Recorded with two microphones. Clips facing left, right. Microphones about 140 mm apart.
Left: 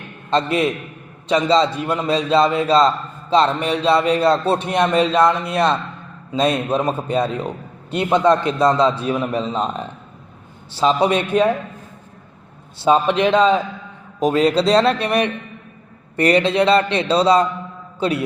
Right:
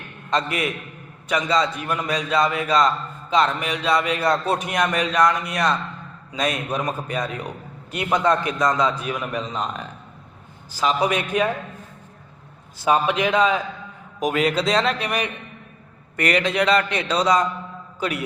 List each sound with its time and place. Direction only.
0.3 s a man's voice: 30° left (ahead or behind)
13.1 s a man's voice: 30° left (ahead or behind)